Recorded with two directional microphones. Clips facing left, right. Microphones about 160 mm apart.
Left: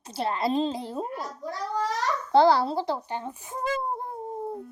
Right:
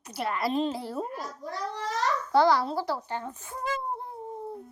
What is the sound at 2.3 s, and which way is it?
A child's voice, 30° left (ahead or behind).